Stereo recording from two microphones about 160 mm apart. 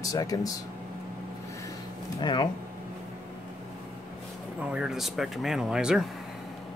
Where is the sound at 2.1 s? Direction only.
30° left (ahead or behind).